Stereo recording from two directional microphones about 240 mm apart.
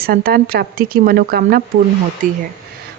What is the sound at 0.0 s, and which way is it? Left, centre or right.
A woman's voice, right.